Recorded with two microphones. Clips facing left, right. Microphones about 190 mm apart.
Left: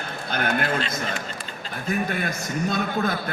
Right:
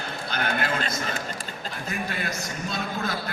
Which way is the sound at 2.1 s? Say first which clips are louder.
Left 4 dB; 50° left (ahead or behind).